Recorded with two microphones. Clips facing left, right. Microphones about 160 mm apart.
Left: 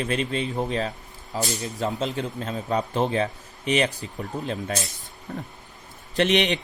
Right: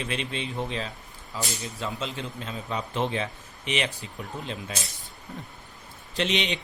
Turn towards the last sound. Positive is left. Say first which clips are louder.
# left 6 dB
turn(degrees=50)  # may be behind; listen again after turning